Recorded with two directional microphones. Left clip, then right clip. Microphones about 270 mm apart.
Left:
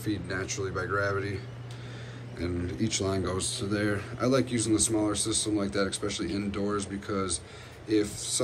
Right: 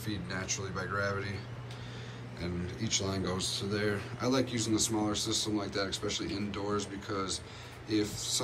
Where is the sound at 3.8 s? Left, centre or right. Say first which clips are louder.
Left 4 dB; centre.